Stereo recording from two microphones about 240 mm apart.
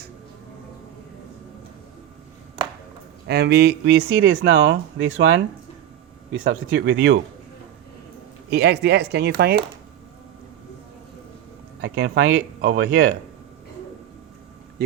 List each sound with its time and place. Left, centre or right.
3.2 s speech: right
8.4 s speech: right
11.8 s speech: right
14.8 s speech: right